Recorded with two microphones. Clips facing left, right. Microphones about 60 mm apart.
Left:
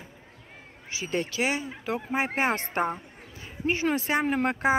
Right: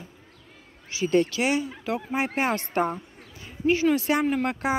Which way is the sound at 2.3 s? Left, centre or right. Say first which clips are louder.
Right 1 dB; left.